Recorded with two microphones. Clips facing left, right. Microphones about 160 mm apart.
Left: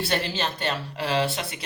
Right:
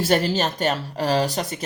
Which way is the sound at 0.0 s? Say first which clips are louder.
Right 7 dB; 40° right (ahead or behind).